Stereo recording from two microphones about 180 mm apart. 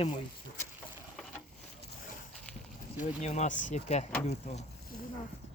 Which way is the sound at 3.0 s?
40° left (ahead or behind).